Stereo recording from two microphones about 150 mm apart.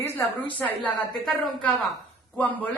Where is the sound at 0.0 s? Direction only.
20° left (ahead or behind).